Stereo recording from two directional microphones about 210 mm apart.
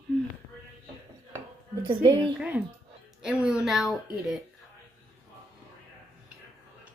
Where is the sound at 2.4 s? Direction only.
5° right (ahead or behind).